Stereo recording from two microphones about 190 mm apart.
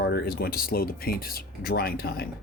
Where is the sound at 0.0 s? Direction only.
55° left (ahead or behind).